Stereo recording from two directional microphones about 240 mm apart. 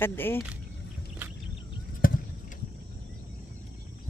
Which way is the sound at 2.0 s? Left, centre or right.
Left.